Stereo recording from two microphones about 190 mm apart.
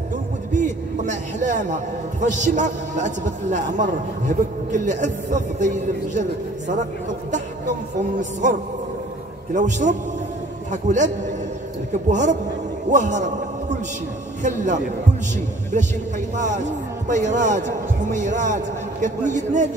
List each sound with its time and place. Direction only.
0.5 s a man's voice: 40° right (ahead or behind)
7.2 s music: 40° right (ahead or behind)
8.2 s a man's voice: 40° right (ahead or behind)
12.1 s a man's voice: 40° right (ahead or behind)
14.4 s a man's voice: 40° right (ahead or behind)
16.3 s a man's voice: 40° right (ahead or behind)